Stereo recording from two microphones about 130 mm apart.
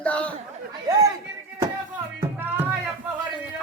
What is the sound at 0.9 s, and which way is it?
Chatter, 30° right (ahead or behind).